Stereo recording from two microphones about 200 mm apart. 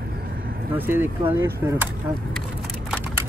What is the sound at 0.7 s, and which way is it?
Speech, 10° right (ahead or behind).